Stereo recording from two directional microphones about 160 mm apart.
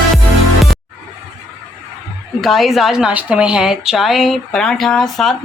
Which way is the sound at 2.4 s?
Centre (ahead or behind).